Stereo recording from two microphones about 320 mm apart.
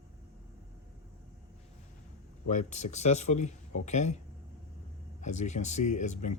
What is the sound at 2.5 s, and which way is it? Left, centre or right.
Speech, left.